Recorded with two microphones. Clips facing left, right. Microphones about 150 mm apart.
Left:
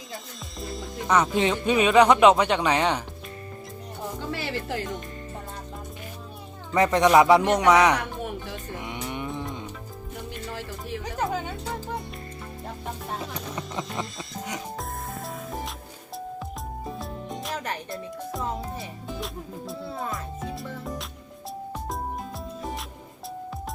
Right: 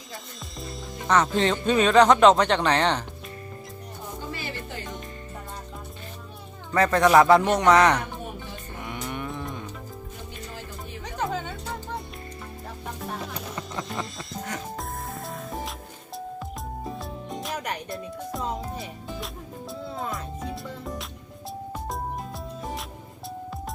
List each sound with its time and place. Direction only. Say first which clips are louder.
0.6 s music: left 3 dB; centre (ahead or behind)
1.1 s speech: even; 10° left (ahead or behind)
4.2 s music: left 4 dB; 75° left (ahead or behind)
6.7 s speech: even; 15° left (ahead or behind)
8.8 s music: right 2 dB; 20° left (ahead or behind)
11.0 s music: even; 5° left (ahead or behind)
13.3 s music: left 1 dB; centre (ahead or behind)
17.0 s music: even; centre (ahead or behind)